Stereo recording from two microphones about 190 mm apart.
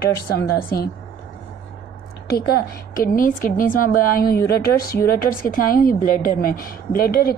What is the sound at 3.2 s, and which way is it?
A woman's voice, 45° left (ahead or behind).